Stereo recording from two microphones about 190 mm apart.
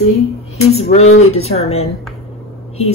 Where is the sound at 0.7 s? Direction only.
35° left (ahead or behind).